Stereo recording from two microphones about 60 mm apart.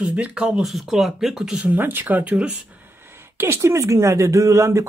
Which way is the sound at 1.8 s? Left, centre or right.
Right.